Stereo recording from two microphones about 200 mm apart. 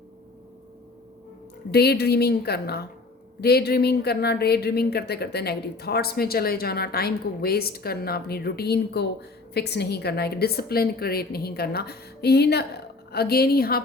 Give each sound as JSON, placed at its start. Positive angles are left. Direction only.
{"t": 1.7, "sound": "speech", "side_deg": 55}